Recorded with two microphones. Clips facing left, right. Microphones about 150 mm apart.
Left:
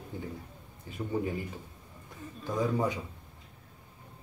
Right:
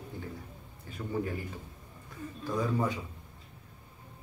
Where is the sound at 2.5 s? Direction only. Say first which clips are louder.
Left 1 dB; 20° left (ahead or behind).